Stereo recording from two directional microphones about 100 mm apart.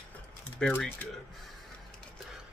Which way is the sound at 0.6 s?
10° left (ahead or behind).